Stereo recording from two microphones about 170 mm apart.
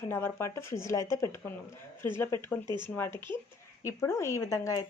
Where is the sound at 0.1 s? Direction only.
15° left (ahead or behind).